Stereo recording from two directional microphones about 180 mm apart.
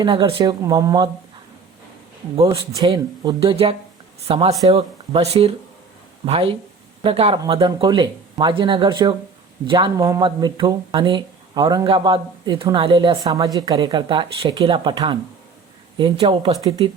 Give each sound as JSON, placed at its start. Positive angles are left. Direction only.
{"t": 0.0, "sound": "speech", "side_deg": -25}
{"t": 2.4, "sound": "speech", "side_deg": -20}
{"t": 16.6, "sound": "speech", "side_deg": -20}